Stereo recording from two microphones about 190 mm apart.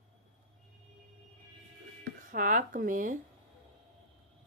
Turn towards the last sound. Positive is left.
turn(degrees=-45)  # may be behind; listen again after turning